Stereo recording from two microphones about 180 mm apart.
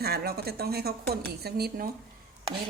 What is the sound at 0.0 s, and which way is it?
A woman's voice, 60° right (ahead or behind).